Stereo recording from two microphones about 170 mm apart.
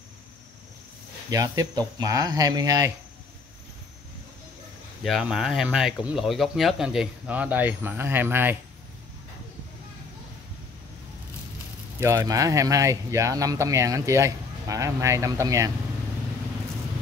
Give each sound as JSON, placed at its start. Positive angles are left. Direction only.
{"t": 1.3, "sound": "speech", "side_deg": -20}
{"t": 5.0, "sound": "speech", "side_deg": 0}
{"t": 12.0, "sound": "speech", "side_deg": -15}